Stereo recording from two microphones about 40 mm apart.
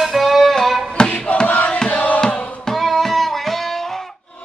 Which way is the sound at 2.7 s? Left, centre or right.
Centre.